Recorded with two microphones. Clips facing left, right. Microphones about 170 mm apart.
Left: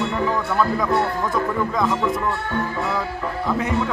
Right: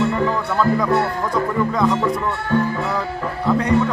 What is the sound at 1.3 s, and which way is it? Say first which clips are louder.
Music: right 2 dB; centre (ahead or behind).